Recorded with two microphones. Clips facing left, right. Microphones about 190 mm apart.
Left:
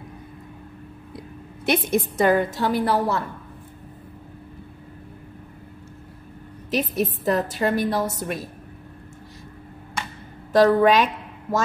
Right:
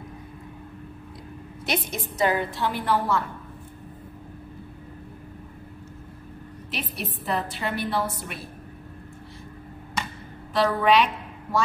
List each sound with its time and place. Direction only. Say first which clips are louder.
1.7 s a woman's voice: left 8 dB; 55° left (ahead or behind); by 3.2 s 35° left (ahead or behind)
6.7 s a woman's voice: left 11 dB; 45° left (ahead or behind)
10.5 s a woman's voice: left 5 dB; 45° left (ahead or behind)